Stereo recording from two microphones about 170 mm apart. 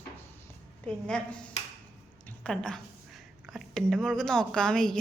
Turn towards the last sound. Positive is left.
turn(degrees=5)  # may be behind; listen again after turning